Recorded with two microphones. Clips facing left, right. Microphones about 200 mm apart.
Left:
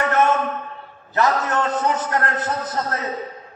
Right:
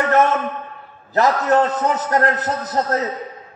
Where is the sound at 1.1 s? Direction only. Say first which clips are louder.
Right 4 dB; 35° right (ahead or behind).